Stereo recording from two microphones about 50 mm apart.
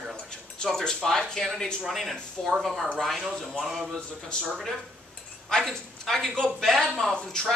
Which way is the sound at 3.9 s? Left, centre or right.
Centre.